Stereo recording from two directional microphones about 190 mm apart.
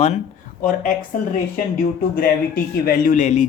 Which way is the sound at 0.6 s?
45° left (ahead or behind).